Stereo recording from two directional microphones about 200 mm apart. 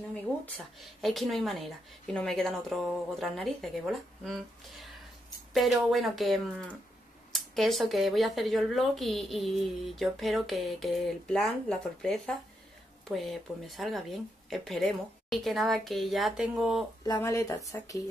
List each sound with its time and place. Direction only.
0.7 s speech: centre (ahead or behind)
17.0 s speech: 15° left (ahead or behind)